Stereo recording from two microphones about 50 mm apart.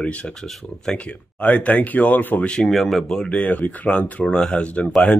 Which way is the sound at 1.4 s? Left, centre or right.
Left.